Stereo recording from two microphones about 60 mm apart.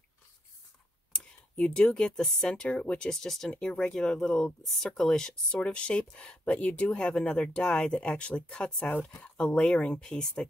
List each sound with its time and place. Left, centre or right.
1.1 s speech: centre
3.5 s speech: centre
7.1 s speech: centre